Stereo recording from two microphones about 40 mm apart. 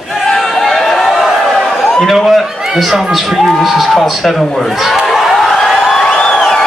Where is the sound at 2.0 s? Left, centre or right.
Centre.